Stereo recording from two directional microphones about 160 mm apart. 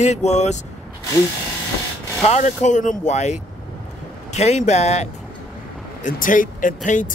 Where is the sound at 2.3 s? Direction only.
50° left (ahead or behind).